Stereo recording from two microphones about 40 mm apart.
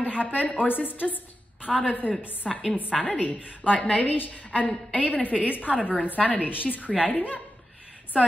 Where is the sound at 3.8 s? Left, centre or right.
Left.